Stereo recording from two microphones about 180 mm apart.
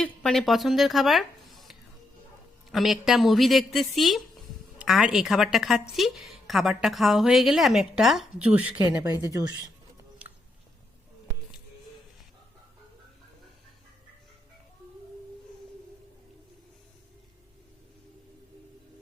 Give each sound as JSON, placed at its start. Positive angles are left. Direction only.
{"t": 0.0, "sound": "a woman's voice", "side_deg": 5}
{"t": 8.8, "sound": "speech", "side_deg": -20}